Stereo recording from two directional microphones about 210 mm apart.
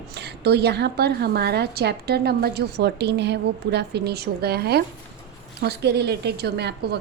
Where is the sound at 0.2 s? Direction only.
50° right (ahead or behind).